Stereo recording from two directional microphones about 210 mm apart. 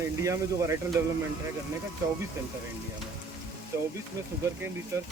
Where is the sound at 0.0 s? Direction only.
15° right (ahead or behind).